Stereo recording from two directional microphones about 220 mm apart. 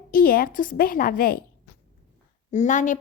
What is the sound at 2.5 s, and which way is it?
Speech, 35° left (ahead or behind).